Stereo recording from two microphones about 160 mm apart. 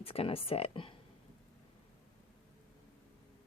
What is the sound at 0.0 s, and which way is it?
Speech, 35° left (ahead or behind).